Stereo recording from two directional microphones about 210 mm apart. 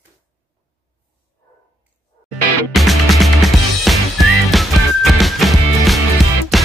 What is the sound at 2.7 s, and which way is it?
Music, centre (ahead or behind).